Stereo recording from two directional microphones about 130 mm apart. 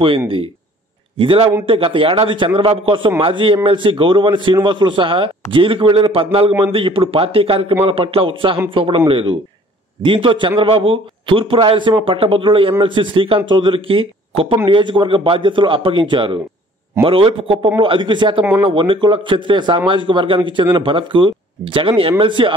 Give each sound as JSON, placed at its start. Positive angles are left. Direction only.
{"t": 1.1, "sound": "a man's voice", "side_deg": -40}